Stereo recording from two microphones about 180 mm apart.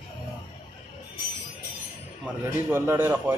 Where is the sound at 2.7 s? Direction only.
10° right (ahead or behind).